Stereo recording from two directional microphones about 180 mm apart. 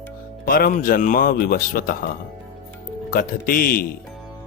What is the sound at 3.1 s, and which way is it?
Speech, 50° left (ahead or behind).